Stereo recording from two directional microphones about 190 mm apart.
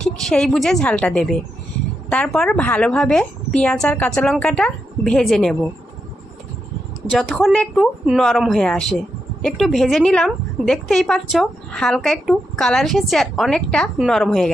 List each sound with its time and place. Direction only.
0.0 s a woman's voice: 5° left (ahead or behind)
7.1 s a woman's voice: centre (ahead or behind)